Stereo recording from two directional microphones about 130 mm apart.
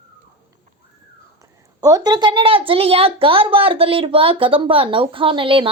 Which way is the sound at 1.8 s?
30° right (ahead or behind).